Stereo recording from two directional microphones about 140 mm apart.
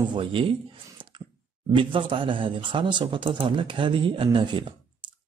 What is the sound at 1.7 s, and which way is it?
Speech, 35° right (ahead or behind).